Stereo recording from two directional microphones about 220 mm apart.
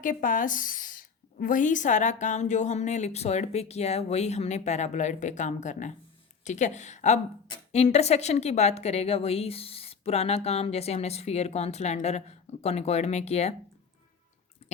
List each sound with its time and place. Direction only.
0.0 s a woman's voice: 35° left (ahead or behind)